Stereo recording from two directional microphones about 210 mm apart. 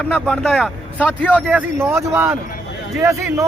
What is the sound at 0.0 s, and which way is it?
A man's voice, 5° left (ahead or behind).